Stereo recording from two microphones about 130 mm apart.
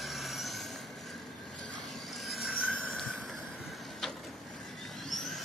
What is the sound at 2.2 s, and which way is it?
Vehicle, centre (ahead or behind).